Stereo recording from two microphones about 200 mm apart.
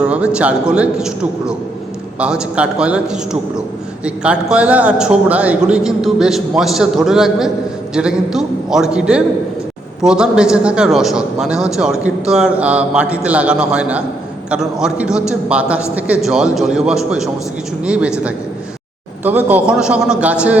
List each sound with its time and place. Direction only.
0.0 s a man's voice: 5° right (ahead or behind)
19.2 s a man's voice: 10° right (ahead or behind)